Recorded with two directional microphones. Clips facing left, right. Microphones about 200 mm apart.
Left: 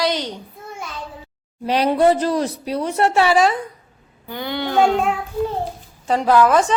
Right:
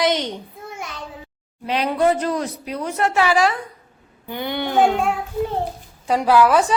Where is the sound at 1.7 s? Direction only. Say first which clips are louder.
Left 3 dB; 35° left (ahead or behind).